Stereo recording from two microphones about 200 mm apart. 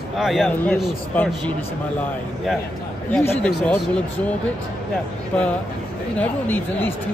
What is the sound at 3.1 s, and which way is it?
Speech, 10° left (ahead or behind).